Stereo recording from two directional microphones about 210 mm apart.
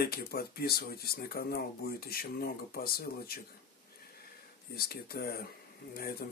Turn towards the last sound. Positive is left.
turn(degrees=45)  # may be behind; listen again after turning